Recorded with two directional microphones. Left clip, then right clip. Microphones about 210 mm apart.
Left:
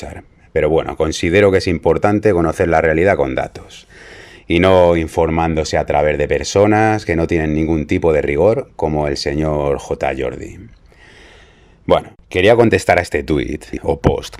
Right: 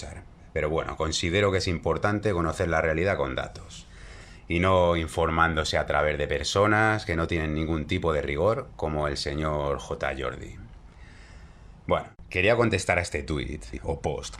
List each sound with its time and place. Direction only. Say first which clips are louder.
0.0 s speech: left 11 dB; 40° left (ahead or behind)
11.9 s speech: left 12 dB; 40° left (ahead or behind)